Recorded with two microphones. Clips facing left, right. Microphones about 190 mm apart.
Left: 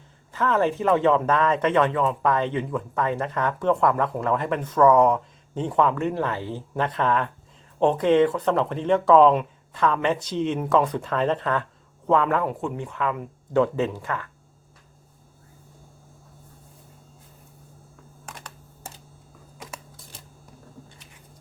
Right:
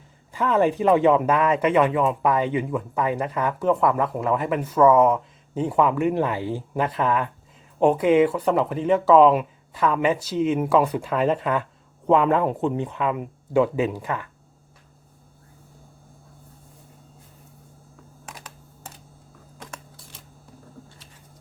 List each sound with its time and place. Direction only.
0.3 s speech: 15° right (ahead or behind)
18.3 s computer keyboard: 5° right (ahead or behind)